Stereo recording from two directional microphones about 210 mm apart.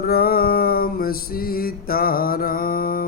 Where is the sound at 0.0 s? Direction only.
45° left (ahead or behind).